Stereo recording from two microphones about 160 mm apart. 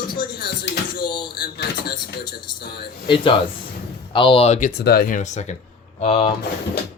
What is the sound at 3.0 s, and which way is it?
Speech, 30° left (ahead or behind).